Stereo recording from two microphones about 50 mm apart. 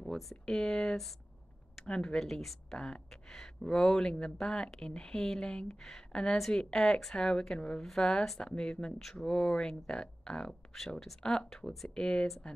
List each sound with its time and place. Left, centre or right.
0.0 s speech: centre
7.8 s speech: centre